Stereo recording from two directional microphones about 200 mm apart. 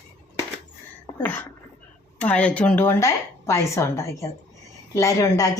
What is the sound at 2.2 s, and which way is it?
Speech, 5° left (ahead or behind).